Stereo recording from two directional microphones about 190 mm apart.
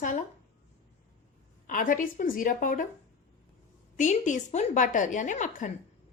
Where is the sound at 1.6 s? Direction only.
45° left (ahead or behind).